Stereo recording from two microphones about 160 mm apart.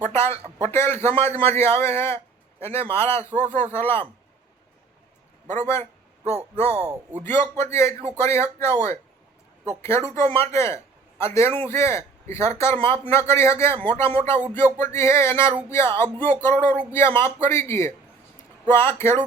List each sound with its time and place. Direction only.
0.1 s a man's voice: 15° left (ahead or behind)
5.5 s speech: 15° left (ahead or behind)
6.7 s speech: 40° right (ahead or behind)
7.2 s a man's voice: 15° left (ahead or behind)